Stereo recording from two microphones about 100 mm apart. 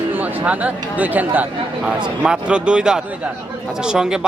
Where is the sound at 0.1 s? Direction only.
15° right (ahead or behind).